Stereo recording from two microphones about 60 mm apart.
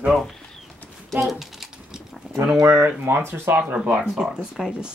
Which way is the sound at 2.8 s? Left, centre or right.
Right.